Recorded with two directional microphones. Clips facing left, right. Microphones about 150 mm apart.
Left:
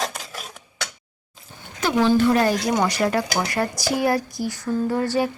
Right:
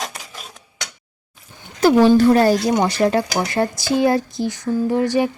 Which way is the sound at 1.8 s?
35° right (ahead or behind).